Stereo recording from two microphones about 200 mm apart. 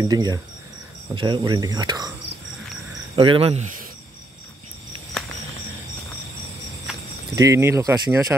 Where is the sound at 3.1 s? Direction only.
25° right (ahead or behind).